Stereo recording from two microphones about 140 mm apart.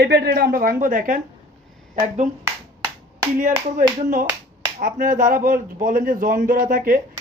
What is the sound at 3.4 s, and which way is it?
A woman's voice, 70° right (ahead or behind).